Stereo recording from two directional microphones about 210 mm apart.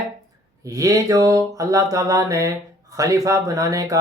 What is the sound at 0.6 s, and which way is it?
Speech, 15° right (ahead or behind).